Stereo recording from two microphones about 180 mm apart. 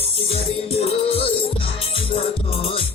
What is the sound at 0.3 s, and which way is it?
Music, 35° left (ahead or behind).